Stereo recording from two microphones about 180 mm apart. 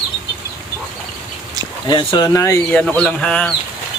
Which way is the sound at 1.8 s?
25° left (ahead or behind).